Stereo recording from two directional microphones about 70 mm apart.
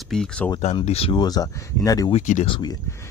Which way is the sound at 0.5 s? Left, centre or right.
Left.